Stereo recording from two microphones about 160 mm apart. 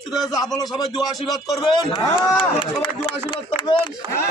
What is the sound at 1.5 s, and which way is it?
Speech, 30° left (ahead or behind).